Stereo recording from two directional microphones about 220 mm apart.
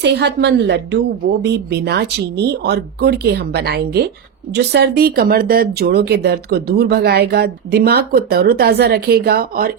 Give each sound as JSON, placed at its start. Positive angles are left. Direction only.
{"t": 0.0, "sound": "speech", "side_deg": -50}